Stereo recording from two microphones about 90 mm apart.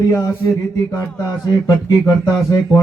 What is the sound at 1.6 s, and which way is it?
Speech, 40° left (ahead or behind).